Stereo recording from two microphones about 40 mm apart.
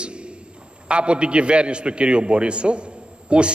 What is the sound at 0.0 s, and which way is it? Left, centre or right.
A man's voice, right.